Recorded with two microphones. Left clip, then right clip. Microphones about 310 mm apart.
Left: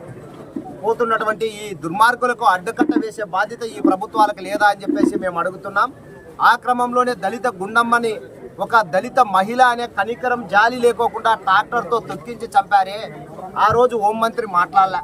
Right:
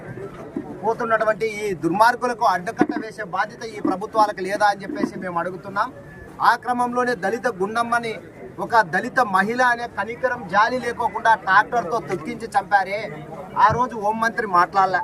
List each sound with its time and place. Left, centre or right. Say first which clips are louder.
0.9 s a man's voice: left 2 dB; centre
11.8 s speech: left 3 dB; left
12.3 s a man's voice: left 4 dB; centre